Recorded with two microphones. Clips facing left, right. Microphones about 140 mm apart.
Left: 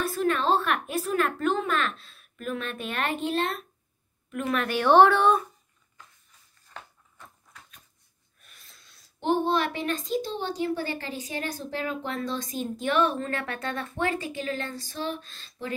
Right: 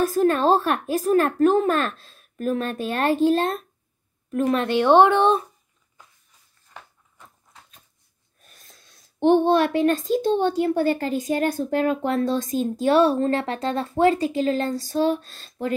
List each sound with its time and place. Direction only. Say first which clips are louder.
0.0 s a woman's voice: right 7 dB; 40° right (ahead or behind)
8.4 s snort: right 4 dB; 40° right (ahead or behind)
9.5 s a woman's voice: right 8 dB; 50° right (ahead or behind)